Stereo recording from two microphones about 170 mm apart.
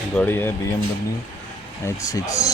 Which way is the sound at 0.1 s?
10° left (ahead or behind).